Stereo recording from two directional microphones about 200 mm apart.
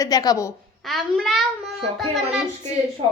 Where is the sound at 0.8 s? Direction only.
Centre (ahead or behind).